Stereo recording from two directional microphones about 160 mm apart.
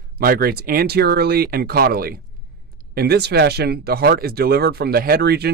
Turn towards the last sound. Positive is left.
turn(degrees=-90)